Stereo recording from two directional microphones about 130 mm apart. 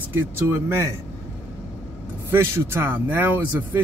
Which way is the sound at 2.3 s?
20° right (ahead or behind).